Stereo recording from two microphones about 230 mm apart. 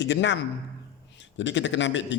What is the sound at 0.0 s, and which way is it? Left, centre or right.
Speech, left.